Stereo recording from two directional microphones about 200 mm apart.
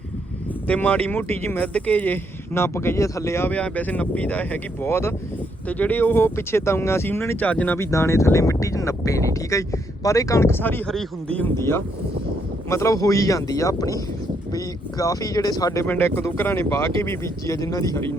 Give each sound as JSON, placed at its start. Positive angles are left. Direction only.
{"t": 0.7, "sound": "speech", "side_deg": 10}